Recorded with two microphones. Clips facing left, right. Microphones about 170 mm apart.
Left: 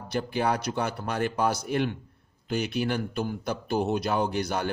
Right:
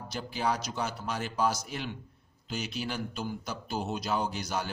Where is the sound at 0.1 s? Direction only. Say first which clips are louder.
Left 5 dB; 60° left (ahead or behind).